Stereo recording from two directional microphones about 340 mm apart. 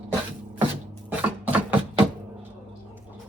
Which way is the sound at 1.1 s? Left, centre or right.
Centre.